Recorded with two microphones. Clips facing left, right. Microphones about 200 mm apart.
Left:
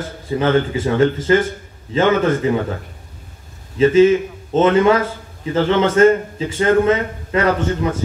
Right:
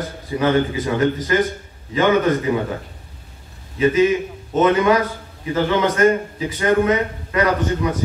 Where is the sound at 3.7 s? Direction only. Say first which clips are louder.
Left 4 dB; 25° left (ahead or behind).